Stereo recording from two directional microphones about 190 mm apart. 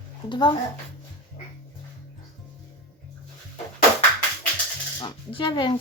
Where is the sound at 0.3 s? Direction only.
25° left (ahead or behind).